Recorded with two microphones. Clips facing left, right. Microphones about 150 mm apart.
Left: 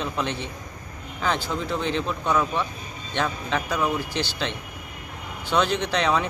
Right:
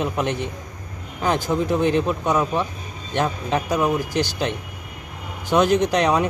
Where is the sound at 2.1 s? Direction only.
15° right (ahead or behind).